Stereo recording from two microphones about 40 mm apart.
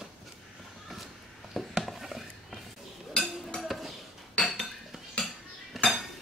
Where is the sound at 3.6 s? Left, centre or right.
Centre.